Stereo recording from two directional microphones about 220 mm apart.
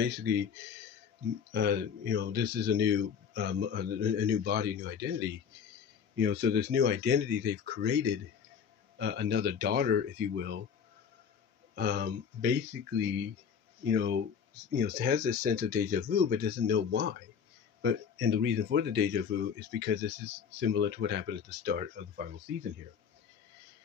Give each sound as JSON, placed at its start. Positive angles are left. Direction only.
{"t": 0.0, "sound": "speech", "side_deg": -50}
{"t": 1.5, "sound": "speech", "side_deg": -50}
{"t": 11.7, "sound": "speech", "side_deg": -45}